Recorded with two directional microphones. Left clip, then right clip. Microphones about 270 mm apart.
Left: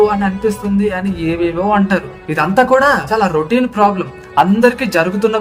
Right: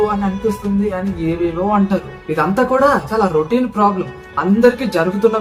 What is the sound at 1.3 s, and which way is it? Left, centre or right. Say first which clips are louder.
Speech: left 3 dB; left.